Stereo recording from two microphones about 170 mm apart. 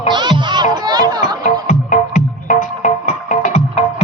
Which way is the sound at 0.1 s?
25° right (ahead or behind).